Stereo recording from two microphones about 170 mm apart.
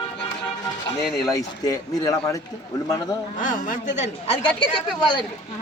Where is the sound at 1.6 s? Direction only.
20° left (ahead or behind).